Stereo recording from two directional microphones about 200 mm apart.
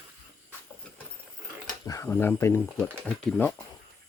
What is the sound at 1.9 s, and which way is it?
Speech, 15° left (ahead or behind).